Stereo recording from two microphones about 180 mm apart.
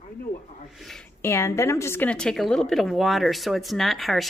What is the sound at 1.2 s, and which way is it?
A woman's voice, 15° left (ahead or behind).